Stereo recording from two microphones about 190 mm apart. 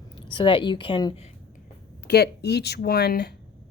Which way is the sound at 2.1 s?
60° left (ahead or behind).